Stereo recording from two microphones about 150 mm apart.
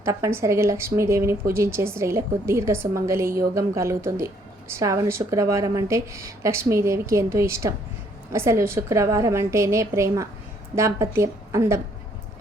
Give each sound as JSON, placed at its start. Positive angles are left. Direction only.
{"t": 0.0, "sound": "a woman's voice", "side_deg": -20}